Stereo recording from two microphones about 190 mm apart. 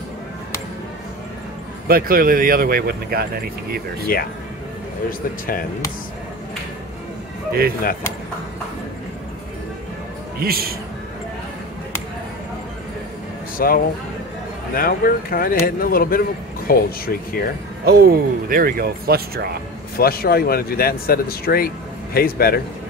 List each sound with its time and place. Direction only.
1.9 s speech: 50° right (ahead or behind)
4.1 s speech: 50° left (ahead or behind)
10.4 s speech: 55° right (ahead or behind)
13.6 s speech: 50° left (ahead or behind)
17.8 s speech: 55° right (ahead or behind)
20.0 s speech: 55° left (ahead or behind)